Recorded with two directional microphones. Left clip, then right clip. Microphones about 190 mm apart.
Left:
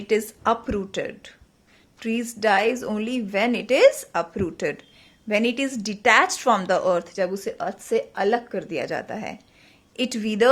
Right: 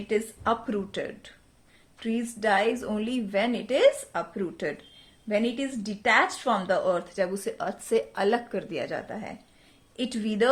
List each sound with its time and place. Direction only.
0.1 s a woman's voice: 30° left (ahead or behind)